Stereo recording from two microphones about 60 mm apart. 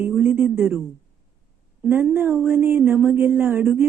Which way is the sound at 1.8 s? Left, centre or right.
Right.